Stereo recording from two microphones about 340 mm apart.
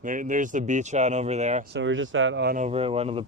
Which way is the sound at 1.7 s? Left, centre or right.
Right.